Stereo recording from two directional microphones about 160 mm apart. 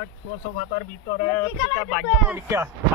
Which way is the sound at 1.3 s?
10° left (ahead or behind).